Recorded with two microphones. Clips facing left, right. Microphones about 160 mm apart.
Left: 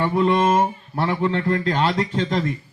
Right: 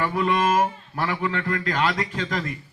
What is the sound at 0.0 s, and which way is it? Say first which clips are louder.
A man's voice: left 4 dB; 25° left (ahead or behind).